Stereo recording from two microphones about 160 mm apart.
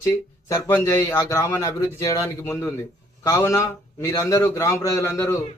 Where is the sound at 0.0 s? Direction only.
20° left (ahead or behind).